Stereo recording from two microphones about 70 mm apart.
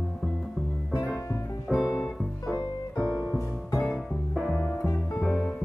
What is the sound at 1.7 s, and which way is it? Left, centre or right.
Music, centre.